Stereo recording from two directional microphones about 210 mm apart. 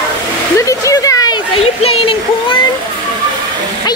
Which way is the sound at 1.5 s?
30° left (ahead or behind).